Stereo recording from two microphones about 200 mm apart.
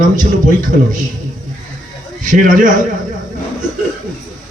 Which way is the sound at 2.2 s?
40° right (ahead or behind).